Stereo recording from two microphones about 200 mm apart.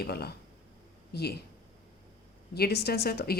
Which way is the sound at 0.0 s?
50° left (ahead or behind).